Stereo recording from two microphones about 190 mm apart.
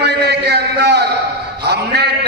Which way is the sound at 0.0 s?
60° right (ahead or behind).